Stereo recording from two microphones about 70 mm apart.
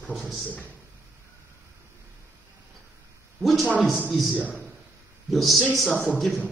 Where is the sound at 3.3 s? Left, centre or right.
Centre.